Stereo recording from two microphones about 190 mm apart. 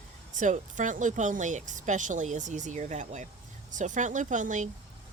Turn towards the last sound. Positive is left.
turn(degrees=-40)  # may be behind; listen again after turning